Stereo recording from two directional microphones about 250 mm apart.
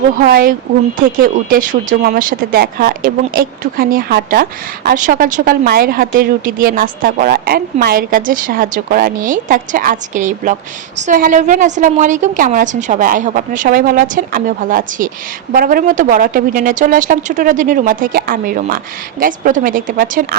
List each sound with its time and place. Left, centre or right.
0.2 s a woman's voice: right